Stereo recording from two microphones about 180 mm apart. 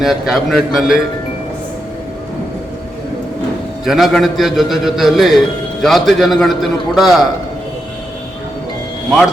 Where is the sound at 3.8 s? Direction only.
Centre (ahead or behind).